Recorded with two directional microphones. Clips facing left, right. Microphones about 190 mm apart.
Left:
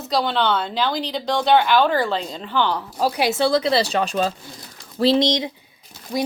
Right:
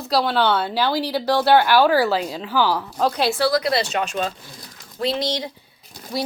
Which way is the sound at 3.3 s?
25° left (ahead or behind).